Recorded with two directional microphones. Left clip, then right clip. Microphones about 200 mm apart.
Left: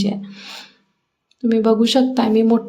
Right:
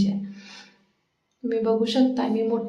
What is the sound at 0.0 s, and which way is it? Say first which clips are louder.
A woman's voice: left 4 dB; 30° left (ahead or behind).